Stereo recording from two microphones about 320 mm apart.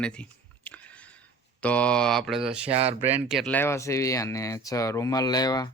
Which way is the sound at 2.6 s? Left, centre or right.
Centre.